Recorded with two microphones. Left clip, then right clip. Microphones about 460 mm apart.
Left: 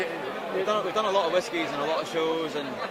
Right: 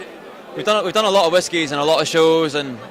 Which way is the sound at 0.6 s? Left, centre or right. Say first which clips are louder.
Right 11 dB; right.